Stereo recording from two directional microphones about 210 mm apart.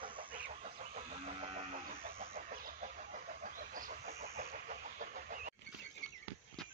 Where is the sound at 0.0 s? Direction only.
25° right (ahead or behind).